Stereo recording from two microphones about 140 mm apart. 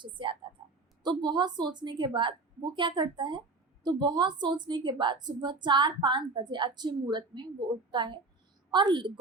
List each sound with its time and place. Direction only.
0.0 s a woman's voice: 35° right (ahead or behind)